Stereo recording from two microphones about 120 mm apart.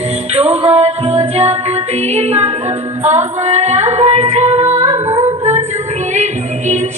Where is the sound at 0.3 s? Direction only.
60° right (ahead or behind).